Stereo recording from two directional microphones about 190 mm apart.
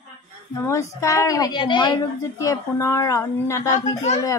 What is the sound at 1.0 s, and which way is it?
A woman's voice, 15° left (ahead or behind).